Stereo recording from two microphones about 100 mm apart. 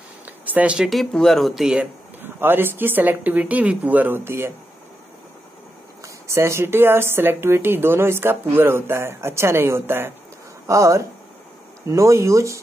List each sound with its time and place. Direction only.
0.2 s a sound: 15° right (ahead or behind)
0.8 s speech: centre (ahead or behind)
2.2 s a woman's voice: 20° right (ahead or behind)
6.2 s a woman's voice: 30° right (ahead or behind)